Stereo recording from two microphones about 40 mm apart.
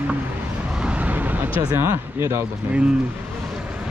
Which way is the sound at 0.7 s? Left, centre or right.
Right.